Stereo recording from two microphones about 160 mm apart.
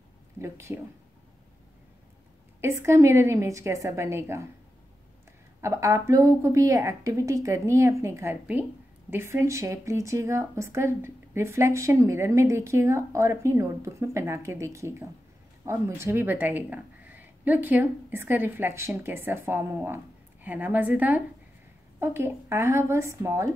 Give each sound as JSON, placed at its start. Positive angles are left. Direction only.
{"t": 0.4, "sound": "speech", "side_deg": -15}
{"t": 2.6, "sound": "speech", "side_deg": -15}
{"t": 5.6, "sound": "a woman's voice", "side_deg": -20}